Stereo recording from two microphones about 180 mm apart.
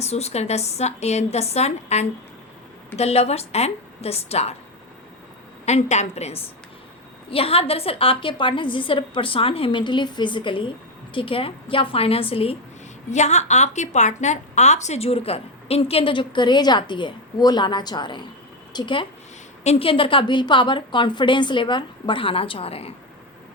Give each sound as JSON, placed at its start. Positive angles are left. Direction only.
{"t": 0.0, "sound": "a woman's voice", "side_deg": 35}
{"t": 5.6, "sound": "a woman's voice", "side_deg": 40}